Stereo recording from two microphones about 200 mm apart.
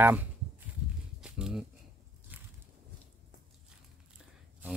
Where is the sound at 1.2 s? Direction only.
5° right (ahead or behind).